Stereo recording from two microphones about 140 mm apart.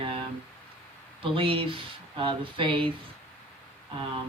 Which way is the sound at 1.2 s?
40° right (ahead or behind).